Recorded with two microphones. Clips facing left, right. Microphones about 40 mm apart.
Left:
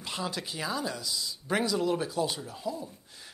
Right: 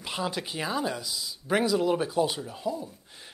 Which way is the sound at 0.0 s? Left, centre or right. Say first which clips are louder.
Right 3 dB; centre.